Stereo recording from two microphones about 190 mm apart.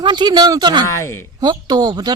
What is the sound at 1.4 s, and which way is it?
Speech, 20° right (ahead or behind).